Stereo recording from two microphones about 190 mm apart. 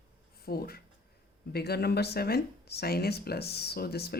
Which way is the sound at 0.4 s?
55° left (ahead or behind).